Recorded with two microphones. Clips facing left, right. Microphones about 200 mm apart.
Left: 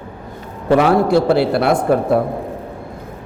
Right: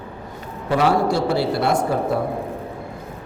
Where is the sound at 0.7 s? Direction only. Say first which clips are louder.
Left 6 dB; 55° left (ahead or behind).